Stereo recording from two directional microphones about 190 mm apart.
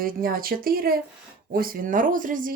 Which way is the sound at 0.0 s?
50° right (ahead or behind).